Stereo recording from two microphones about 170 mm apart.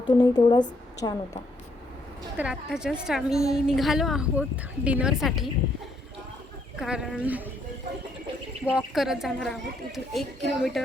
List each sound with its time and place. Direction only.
0.2 s a woman's voice: 25° left (ahead or behind)
2.4 s a woman's voice: 5° right (ahead or behind)
6.7 s a woman's voice: 5° right (ahead or behind)
8.6 s a woman's voice: 5° right (ahead or behind)